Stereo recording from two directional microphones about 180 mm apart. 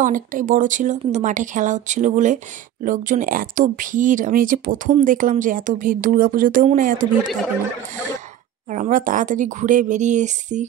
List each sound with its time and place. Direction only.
0.0 s speech: 45° right (ahead or behind)
8.6 s speech: 45° right (ahead or behind)